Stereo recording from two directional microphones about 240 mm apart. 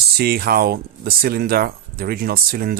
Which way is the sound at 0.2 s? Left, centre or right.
Right.